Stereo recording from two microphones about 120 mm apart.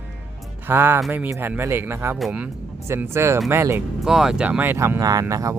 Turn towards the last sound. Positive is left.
turn(degrees=-25)  # may be behind; listen again after turning